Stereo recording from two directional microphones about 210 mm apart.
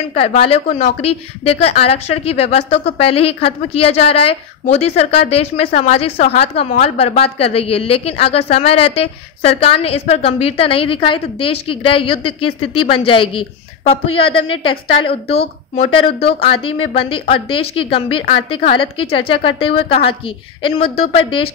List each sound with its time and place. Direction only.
0.1 s a woman's voice: 30° left (ahead or behind)